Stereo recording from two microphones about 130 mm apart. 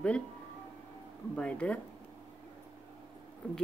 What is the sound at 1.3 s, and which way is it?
Speech, 10° left (ahead or behind).